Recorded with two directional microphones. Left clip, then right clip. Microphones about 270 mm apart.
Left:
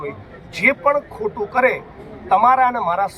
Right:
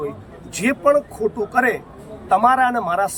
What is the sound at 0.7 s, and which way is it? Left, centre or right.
Speech, centre.